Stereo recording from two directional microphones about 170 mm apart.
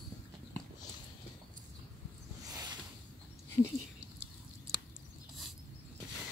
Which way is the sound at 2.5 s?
20° right (ahead or behind).